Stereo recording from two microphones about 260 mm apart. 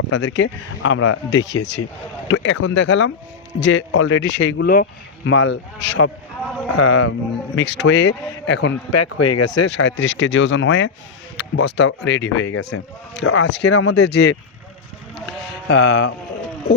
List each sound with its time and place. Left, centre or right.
0.1 s speech: left
4.3 s speech: left
4.5 s speech: left
6.7 s speech: left
7.1 s speech: left
9.0 s speech: left
9.6 s speech: left
13.7 s speech: left
13.9 s speech: left
15.7 s speech: left